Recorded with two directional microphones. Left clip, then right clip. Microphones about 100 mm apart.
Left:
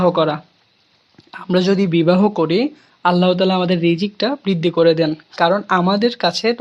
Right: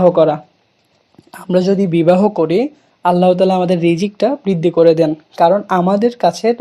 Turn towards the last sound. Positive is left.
turn(degrees=-15)  # may be behind; listen again after turning